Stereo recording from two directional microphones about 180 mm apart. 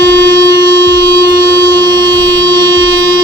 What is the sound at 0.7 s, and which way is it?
Civil defense siren, 80° right.